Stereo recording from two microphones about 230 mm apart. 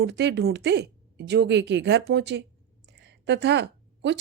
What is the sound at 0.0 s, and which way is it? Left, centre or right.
Speech, right.